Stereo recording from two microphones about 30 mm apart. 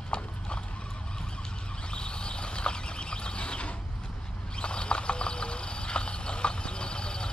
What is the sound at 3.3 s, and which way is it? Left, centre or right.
Mechanisms, left.